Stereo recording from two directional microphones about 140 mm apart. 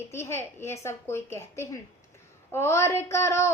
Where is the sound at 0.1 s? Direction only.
20° left (ahead or behind).